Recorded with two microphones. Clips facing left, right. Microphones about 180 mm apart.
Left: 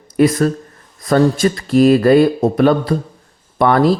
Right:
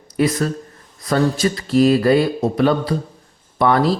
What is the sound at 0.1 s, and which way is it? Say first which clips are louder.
A man's voice: left 5 dB; 50° left (ahead or behind).